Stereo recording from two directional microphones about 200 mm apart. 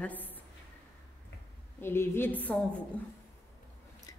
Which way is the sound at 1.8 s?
10° left (ahead or behind).